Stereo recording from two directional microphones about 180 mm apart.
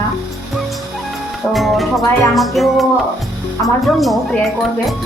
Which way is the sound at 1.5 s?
Centre (ahead or behind).